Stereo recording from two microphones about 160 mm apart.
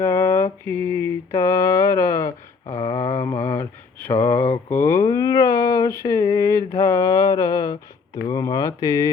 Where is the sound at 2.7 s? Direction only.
20° left (ahead or behind).